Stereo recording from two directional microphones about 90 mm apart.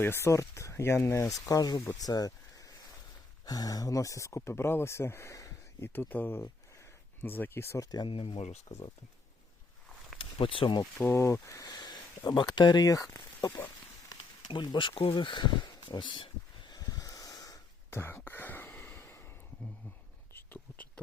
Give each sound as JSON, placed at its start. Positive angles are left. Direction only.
{"t": 0.0, "sound": "speech", "side_deg": 30}
{"t": 1.5, "sound": "speech", "side_deg": 45}
{"t": 5.9, "sound": "speech", "side_deg": 20}
{"t": 8.0, "sound": "speech", "side_deg": 85}
{"t": 10.2, "sound": "speech", "side_deg": 90}
{"t": 11.1, "sound": "speech", "side_deg": 30}
{"t": 11.6, "sound": "speech", "side_deg": 50}
{"t": 14.1, "sound": "speech", "side_deg": 60}
{"t": 16.7, "sound": "snort", "side_deg": 40}
{"t": 17.9, "sound": "whispering", "side_deg": 25}
{"t": 20.3, "sound": "a sound", "side_deg": 20}